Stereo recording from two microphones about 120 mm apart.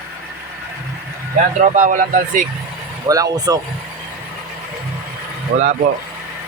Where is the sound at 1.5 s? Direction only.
90° right.